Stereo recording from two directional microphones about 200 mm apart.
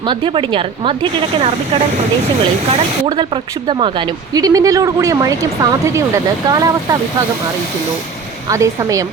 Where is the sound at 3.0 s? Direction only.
25° right (ahead or behind).